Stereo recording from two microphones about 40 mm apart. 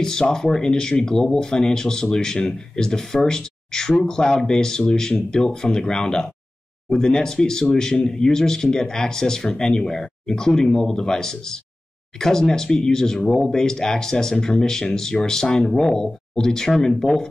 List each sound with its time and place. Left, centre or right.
0.0 s speech: centre